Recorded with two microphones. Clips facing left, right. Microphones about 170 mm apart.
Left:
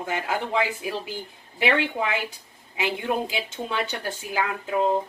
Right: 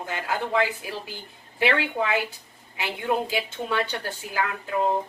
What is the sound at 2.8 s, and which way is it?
Speech, 15° left (ahead or behind).